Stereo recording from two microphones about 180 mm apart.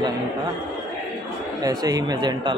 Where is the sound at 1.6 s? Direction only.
20° right (ahead or behind).